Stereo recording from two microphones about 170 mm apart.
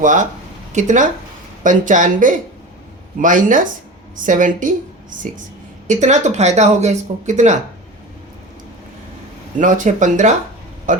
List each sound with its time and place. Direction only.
0.0 s speech: 50° right (ahead or behind)
5.9 s speech: 45° right (ahead or behind)
9.6 s speech: 50° right (ahead or behind)